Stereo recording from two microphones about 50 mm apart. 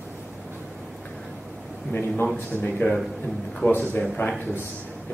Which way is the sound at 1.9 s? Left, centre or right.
Left.